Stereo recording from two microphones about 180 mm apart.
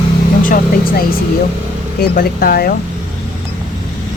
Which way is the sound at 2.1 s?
55° left (ahead or behind).